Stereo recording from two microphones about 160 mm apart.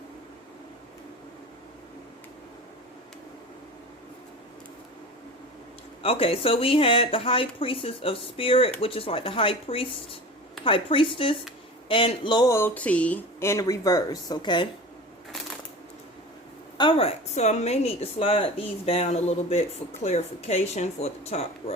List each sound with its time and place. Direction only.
6.0 s a woman's voice: 35° left (ahead or behind)
16.7 s a woman's voice: 30° left (ahead or behind)